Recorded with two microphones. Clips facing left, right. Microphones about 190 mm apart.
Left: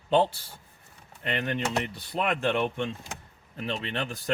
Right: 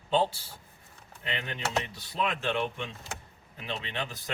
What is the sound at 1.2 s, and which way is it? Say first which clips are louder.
Speech: left 6 dB; 55° left (ahead or behind).